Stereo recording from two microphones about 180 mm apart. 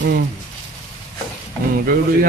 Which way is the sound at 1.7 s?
55° right (ahead or behind).